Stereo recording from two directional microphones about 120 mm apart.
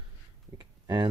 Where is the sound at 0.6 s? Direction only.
35° right (ahead or behind).